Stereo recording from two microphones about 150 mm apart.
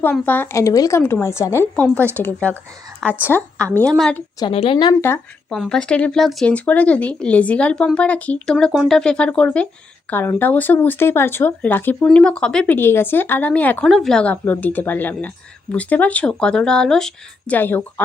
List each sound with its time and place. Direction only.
0.0 s a woman's voice: 15° left (ahead or behind)
4.4 s a woman's voice: 35° left (ahead or behind)
4.9 s speech: 15° left (ahead or behind)
5.5 s speech: 5° left (ahead or behind)